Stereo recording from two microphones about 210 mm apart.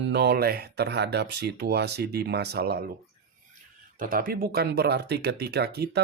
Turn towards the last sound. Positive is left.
turn(degrees=-50)  # may be behind; listen again after turning